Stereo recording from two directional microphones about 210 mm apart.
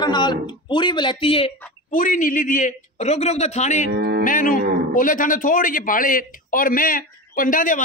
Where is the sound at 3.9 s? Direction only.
45° right (ahead or behind).